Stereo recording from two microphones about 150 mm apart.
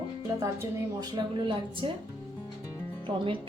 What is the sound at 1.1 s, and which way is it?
Speech, 30° right (ahead or behind).